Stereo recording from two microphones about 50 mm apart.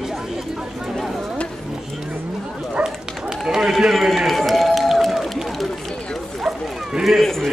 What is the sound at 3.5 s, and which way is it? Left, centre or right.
Run, centre.